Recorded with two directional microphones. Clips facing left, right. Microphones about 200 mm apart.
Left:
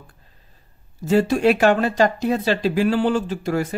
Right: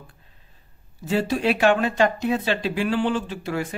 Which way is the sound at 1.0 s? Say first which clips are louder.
Left 5 dB; 45° left (ahead or behind).